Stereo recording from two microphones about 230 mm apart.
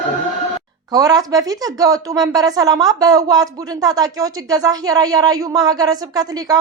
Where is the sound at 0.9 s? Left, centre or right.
Centre.